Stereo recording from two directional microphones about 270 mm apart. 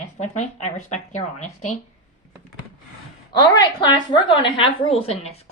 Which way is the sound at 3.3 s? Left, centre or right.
Centre.